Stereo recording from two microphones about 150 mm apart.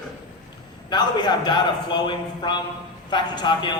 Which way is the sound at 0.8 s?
30° left (ahead or behind).